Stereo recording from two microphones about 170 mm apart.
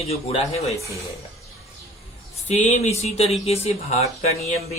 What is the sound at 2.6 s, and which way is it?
A man's voice, 40° left (ahead or behind).